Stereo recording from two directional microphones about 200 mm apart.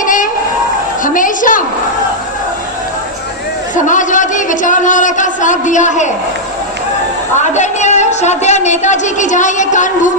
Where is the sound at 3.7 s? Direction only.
40° left (ahead or behind).